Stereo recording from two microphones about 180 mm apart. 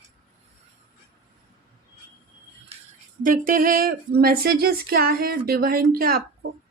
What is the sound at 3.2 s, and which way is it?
Speech, 50° right (ahead or behind).